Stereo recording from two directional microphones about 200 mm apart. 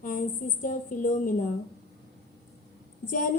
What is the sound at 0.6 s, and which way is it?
Speech, 40° left (ahead or behind).